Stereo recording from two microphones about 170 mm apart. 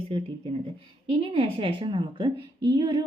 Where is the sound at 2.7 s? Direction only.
30° right (ahead or behind).